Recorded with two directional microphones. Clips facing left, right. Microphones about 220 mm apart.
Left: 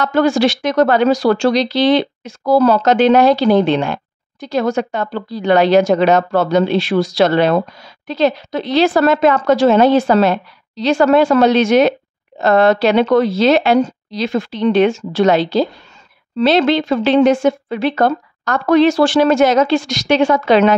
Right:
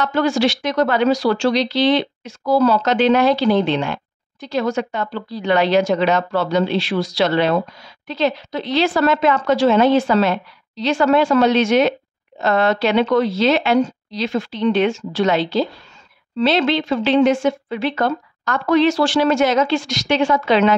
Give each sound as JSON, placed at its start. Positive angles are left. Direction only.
{"t": 0.0, "sound": "a woman's voice", "side_deg": 45}